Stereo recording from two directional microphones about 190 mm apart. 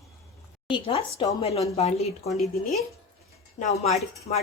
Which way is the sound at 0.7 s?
30° left (ahead or behind).